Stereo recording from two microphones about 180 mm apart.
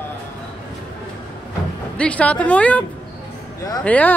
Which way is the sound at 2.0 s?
5° left (ahead or behind).